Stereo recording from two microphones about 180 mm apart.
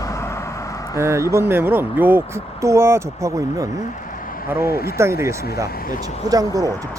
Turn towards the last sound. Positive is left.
turn(degrees=-20)  # may be behind; listen again after turning